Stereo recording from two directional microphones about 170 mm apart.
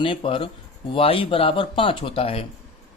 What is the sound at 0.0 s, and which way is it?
A man's voice, 30° left (ahead or behind).